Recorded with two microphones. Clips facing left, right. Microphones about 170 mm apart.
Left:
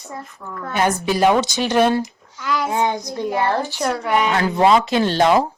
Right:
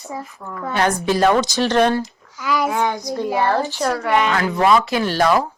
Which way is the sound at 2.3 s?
5° right (ahead or behind).